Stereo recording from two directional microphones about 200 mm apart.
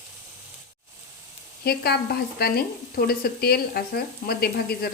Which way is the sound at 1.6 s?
50° left (ahead or behind).